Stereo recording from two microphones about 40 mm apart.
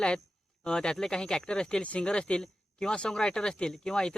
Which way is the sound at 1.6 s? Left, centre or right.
Left.